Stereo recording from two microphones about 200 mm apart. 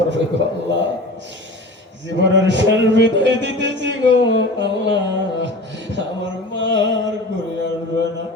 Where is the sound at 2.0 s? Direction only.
65° right (ahead or behind).